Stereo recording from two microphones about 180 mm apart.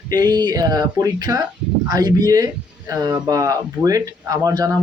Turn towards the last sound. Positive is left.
turn(degrees=-20)  # may be behind; listen again after turning